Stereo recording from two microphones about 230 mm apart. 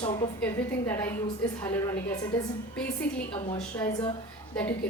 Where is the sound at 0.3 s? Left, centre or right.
Centre.